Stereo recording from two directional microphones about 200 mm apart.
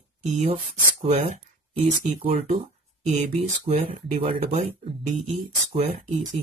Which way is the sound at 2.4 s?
40° right (ahead or behind).